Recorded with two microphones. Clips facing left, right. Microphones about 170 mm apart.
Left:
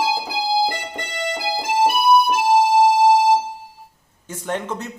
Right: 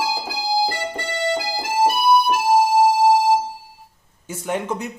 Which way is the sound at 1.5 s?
20° left (ahead or behind).